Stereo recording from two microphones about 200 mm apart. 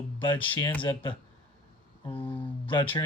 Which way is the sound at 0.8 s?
25° left (ahead or behind).